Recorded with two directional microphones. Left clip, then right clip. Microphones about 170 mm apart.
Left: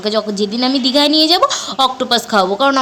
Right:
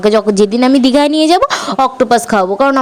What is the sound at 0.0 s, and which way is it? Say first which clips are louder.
Speech: right 7 dB; 55° right (ahead or behind).